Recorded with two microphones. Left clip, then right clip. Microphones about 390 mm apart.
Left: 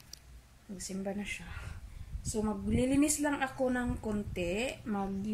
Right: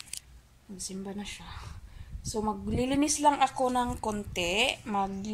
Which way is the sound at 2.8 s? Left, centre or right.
Right.